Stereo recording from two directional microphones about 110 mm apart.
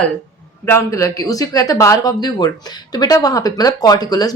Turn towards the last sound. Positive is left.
turn(degrees=35)  # may be behind; listen again after turning